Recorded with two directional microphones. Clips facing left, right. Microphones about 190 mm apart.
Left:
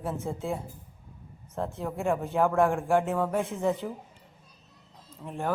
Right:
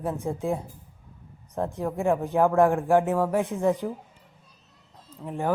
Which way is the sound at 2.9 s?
Centre (ahead or behind).